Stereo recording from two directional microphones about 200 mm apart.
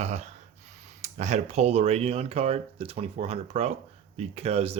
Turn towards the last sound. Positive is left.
turn(degrees=-30)  # may be behind; listen again after turning